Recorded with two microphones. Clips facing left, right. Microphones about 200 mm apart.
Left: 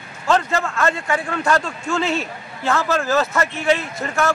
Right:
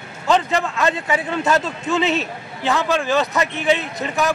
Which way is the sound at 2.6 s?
15° right (ahead or behind).